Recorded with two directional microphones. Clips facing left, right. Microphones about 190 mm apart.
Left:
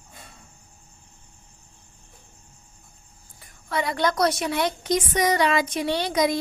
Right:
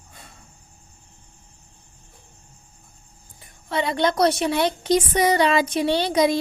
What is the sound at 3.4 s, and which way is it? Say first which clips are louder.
A woman's voice: right 2 dB; 25° right (ahead or behind).